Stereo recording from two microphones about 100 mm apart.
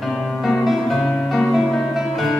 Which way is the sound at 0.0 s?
Centre (ahead or behind).